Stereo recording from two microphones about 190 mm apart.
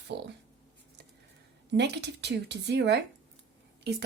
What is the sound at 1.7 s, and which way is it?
Speech, 65° right (ahead or behind).